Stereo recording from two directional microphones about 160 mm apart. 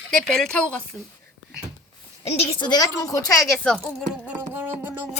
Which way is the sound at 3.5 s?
5° left (ahead or behind).